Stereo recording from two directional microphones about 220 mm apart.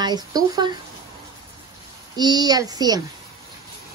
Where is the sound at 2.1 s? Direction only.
20° right (ahead or behind).